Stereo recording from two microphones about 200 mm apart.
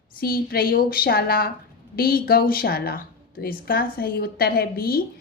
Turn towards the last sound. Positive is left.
turn(degrees=50)  # may be behind; listen again after turning